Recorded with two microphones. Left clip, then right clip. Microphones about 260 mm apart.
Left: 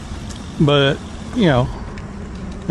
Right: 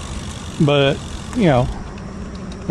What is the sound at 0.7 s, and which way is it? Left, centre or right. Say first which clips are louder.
Speech: even; centre.